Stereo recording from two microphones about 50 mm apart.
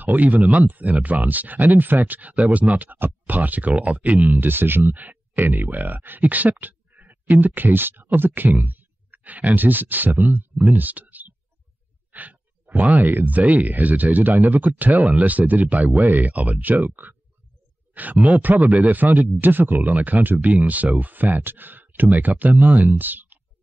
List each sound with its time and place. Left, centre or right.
0.0 s speech: right
10.7 s a sound: right
12.1 s speech: right
18.2 s speech: right